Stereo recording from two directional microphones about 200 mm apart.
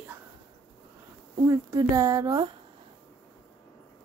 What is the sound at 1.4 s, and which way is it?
Speech, 15° right (ahead or behind).